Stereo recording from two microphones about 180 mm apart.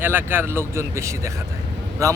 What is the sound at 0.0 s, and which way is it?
A man's voice, 10° right (ahead or behind).